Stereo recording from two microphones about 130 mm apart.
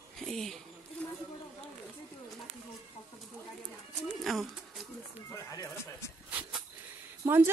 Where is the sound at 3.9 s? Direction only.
Centre (ahead or behind).